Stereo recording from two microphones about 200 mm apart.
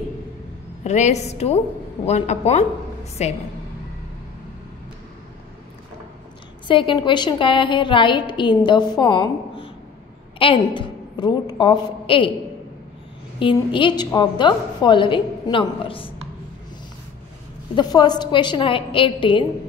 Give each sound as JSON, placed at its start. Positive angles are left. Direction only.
{"t": 0.8, "sound": "a woman's voice", "side_deg": 35}
{"t": 6.7, "sound": "a woman's voice", "side_deg": 25}
{"t": 13.4, "sound": "a woman's voice", "side_deg": 25}
{"t": 17.7, "sound": "a woman's voice", "side_deg": 20}